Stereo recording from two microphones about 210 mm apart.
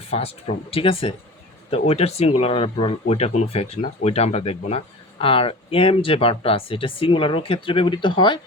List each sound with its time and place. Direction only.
0.1 s speech: 30° left (ahead or behind)